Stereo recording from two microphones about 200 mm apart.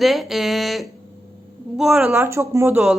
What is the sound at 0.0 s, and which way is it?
A woman's voice, centre (ahead or behind).